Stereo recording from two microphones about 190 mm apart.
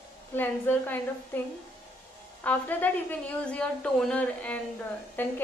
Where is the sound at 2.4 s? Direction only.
10° left (ahead or behind).